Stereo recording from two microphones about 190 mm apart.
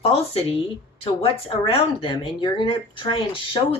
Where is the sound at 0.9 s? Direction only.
30° left (ahead or behind).